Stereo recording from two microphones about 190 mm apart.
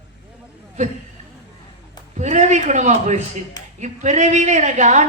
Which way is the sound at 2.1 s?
40° right (ahead or behind).